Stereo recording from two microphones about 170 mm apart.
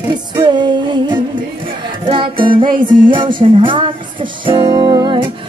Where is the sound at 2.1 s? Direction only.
30° right (ahead or behind).